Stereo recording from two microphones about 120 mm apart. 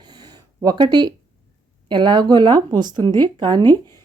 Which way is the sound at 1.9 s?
40° right (ahead or behind).